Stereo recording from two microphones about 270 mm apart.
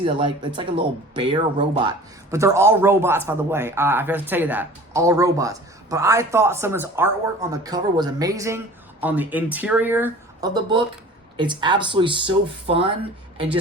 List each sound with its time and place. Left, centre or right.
0.0 s speech: centre